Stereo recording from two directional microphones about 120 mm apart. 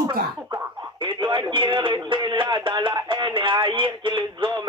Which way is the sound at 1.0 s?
40° right (ahead or behind).